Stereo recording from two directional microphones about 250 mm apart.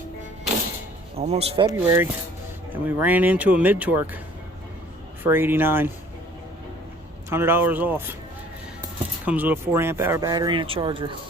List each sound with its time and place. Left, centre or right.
1.1 s speech: right; by 4.2 s centre
5.2 s speech: centre
7.3 s speech: centre
9.2 s speech: centre